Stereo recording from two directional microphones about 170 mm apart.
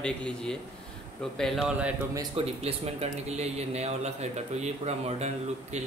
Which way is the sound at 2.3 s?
35° right (ahead or behind).